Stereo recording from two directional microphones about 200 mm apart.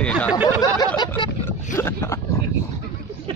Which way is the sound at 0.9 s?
20° left (ahead or behind).